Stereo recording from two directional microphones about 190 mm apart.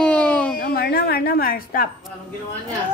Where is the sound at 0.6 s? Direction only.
55° left (ahead or behind).